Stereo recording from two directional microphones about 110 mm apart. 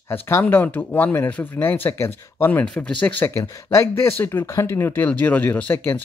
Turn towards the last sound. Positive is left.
turn(degrees=20)  # may be behind; listen again after turning